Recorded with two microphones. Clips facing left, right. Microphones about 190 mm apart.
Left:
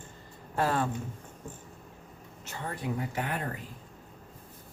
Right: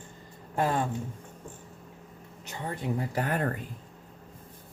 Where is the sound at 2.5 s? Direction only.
25° right (ahead or behind); by 3.5 s 45° right (ahead or behind).